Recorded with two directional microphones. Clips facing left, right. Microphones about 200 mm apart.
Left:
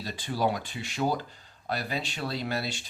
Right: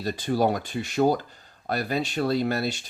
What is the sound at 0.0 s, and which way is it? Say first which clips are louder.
Speech: right 6 dB; 45° right (ahead or behind).